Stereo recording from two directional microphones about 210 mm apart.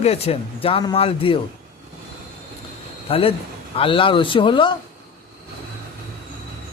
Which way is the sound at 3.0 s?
25° left (ahead or behind).